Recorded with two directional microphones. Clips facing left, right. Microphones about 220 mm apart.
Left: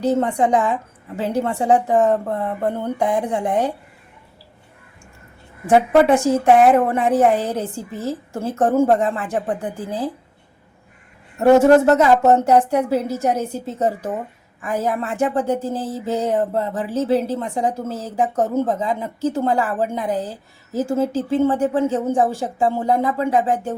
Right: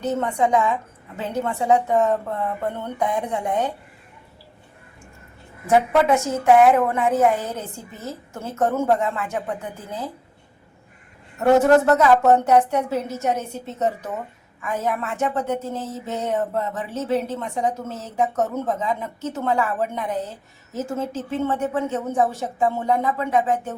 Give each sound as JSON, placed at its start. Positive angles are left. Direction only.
{"t": 0.0, "sound": "speech", "side_deg": 30}
{"t": 6.1, "sound": "speech", "side_deg": 30}
{"t": 11.3, "sound": "speech", "side_deg": 25}